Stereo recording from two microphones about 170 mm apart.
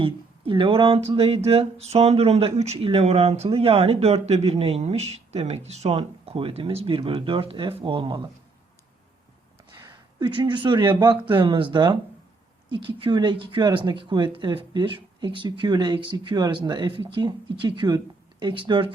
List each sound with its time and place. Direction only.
0.0 s speech: 30° right (ahead or behind)
10.2 s speech: 25° right (ahead or behind)